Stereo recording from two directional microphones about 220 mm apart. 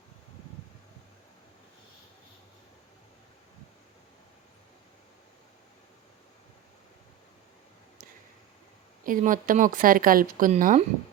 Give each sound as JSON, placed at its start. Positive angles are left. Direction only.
{"t": 9.0, "sound": "speech", "side_deg": -40}